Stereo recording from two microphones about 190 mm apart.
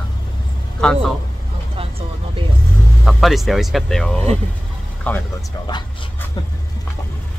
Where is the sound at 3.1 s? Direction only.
Centre (ahead or behind).